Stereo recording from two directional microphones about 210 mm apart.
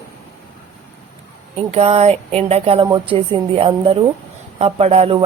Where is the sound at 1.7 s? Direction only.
30° right (ahead or behind).